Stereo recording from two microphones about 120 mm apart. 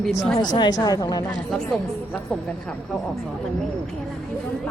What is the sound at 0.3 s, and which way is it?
Speech, 35° left (ahead or behind).